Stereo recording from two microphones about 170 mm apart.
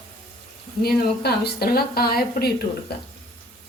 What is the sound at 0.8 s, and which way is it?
A woman's voice, 65° left (ahead or behind).